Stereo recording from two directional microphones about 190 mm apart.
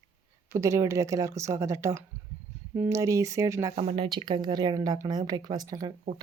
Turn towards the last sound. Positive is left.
turn(degrees=-20)  # may be behind; listen again after turning